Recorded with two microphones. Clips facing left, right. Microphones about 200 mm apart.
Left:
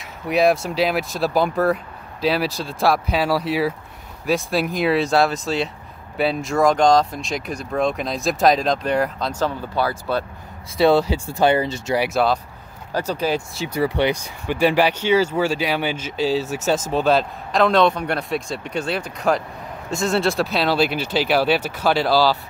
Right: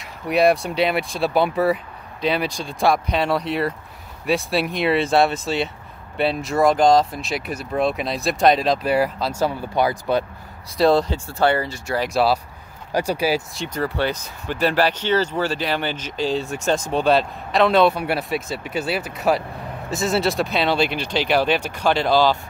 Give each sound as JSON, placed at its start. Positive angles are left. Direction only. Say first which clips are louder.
{"t": 0.0, "sound": "speech", "louder": "even", "side_deg": 0}
{"t": 10.8, "sound": "speech", "louder": "left 1 dB", "side_deg": 5}
{"t": 11.2, "sound": "speech", "louder": "left 2 dB", "side_deg": 15}
{"t": 12.1, "sound": "speech", "louder": "right 3 dB", "side_deg": 0}
{"t": 12.9, "sound": "speech", "louder": "right 1 dB", "side_deg": -10}
{"t": 13.6, "sound": "speech", "louder": "left 3 dB", "side_deg": 10}